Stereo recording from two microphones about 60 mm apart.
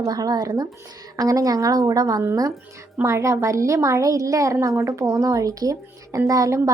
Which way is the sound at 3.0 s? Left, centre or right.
Right.